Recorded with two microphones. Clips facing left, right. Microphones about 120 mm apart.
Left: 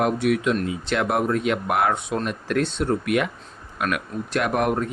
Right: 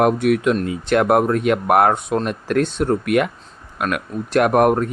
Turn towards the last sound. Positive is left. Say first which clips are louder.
# right 7 dB
turn(degrees=-50)  # may be behind; listen again after turning